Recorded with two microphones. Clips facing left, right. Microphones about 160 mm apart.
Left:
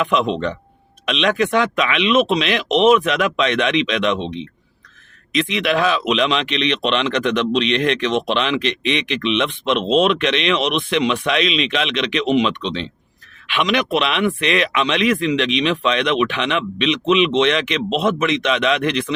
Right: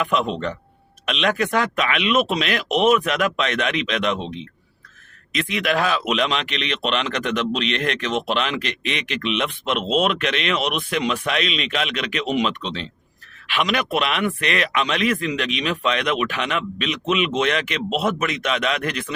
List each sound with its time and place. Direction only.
1.0 s a man's voice: 45° right (ahead or behind)
5.3 s a man's voice: 45° right (ahead or behind)